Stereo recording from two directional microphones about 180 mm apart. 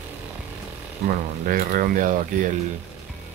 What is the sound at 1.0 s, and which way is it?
Speech, 50° right (ahead or behind).